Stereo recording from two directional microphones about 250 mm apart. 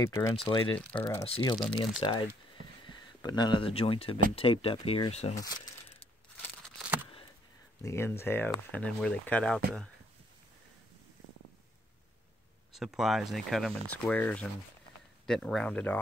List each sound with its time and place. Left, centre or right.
0.0 s speech: centre
0.7 s speech: centre
1.2 s speech: centre
7.8 s speech: centre
12.7 s speech: centre